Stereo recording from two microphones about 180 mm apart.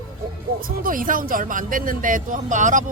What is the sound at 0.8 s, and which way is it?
Speech, 50° right (ahead or behind).